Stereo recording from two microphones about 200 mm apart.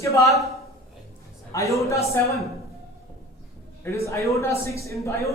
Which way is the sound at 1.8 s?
15° left (ahead or behind).